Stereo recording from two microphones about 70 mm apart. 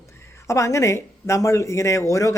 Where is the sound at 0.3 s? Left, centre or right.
Left.